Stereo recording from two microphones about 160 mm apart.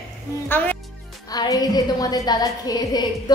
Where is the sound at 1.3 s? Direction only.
25° left (ahead or behind).